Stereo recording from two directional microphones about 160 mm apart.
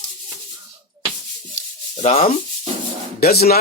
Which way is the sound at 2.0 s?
45° left (ahead or behind).